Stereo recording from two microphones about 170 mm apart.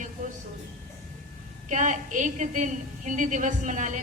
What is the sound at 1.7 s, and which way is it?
A woman's voice, 45° right (ahead or behind).